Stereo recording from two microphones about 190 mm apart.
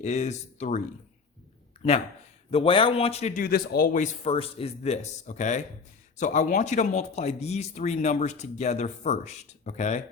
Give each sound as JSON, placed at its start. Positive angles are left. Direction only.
{"t": 0.0, "sound": "speech", "side_deg": 35}
{"t": 2.5, "sound": "speech", "side_deg": 30}